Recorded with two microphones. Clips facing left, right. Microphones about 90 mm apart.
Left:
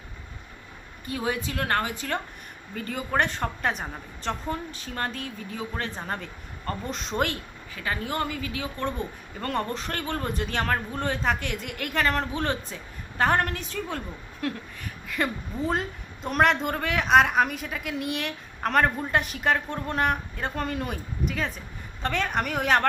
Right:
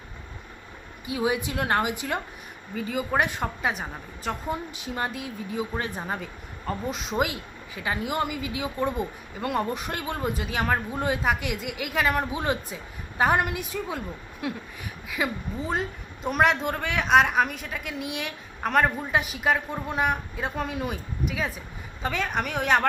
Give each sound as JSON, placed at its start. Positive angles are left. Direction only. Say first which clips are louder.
{"t": 1.0, "sound": "a woman's voice", "louder": "right 3 dB", "side_deg": -10}